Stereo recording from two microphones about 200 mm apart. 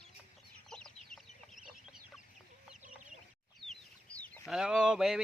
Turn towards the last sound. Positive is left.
turn(degrees=-5)  # may be behind; listen again after turning